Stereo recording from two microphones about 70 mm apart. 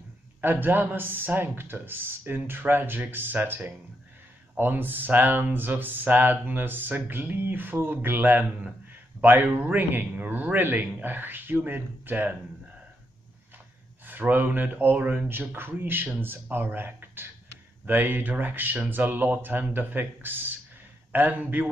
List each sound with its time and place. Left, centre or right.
0.4 s speech: right
14.0 s speech: right
15.2 s speech: right